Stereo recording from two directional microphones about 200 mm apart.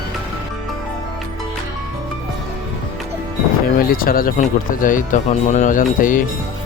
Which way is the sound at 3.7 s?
45° left (ahead or behind).